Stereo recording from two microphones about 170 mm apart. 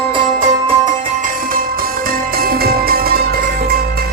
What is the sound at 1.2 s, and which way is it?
Music, 55° right (ahead or behind).